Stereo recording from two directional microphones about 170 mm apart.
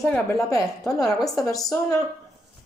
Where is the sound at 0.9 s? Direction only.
20° left (ahead or behind).